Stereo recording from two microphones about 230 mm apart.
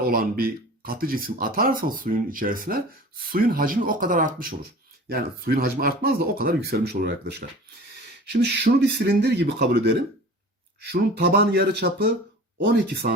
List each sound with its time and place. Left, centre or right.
0.0 s speech: right
10.9 s speech: right